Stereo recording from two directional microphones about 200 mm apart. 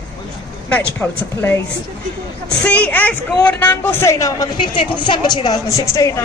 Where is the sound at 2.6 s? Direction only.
5° left (ahead or behind).